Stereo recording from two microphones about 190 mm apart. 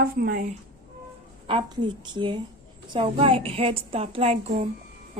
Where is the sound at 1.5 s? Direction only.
25° right (ahead or behind).